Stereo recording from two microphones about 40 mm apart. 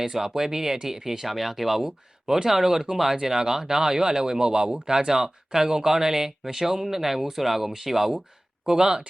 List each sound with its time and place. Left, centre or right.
0.0 s speech: centre